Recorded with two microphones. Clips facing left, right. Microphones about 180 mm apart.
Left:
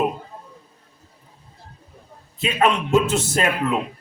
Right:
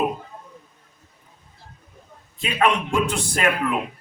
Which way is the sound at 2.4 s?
20° left (ahead or behind).